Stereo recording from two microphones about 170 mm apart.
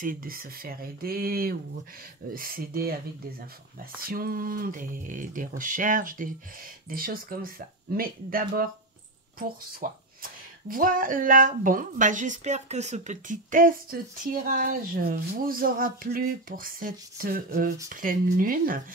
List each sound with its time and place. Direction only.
0.0 s speech: 55° right (ahead or behind)
4.1 s a woman's voice: 60° right (ahead or behind)
9.8 s a woman's voice: 50° right (ahead or behind)